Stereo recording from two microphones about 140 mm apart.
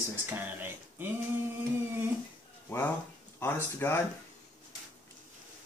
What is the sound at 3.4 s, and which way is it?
Speech, 15° left (ahead or behind).